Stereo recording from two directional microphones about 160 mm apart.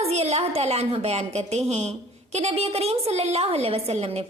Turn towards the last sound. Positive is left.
turn(degrees=-40)  # may be behind; listen again after turning